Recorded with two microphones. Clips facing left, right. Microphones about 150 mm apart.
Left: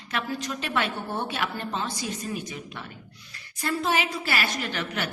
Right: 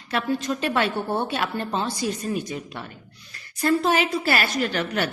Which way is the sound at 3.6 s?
50° right (ahead or behind).